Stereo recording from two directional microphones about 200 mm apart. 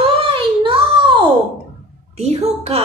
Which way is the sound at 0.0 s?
25° right (ahead or behind).